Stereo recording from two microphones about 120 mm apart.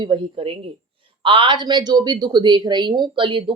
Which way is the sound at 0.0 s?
45° right (ahead or behind).